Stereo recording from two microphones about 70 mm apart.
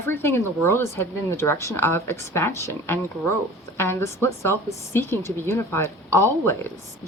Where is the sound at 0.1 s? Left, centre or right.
Left.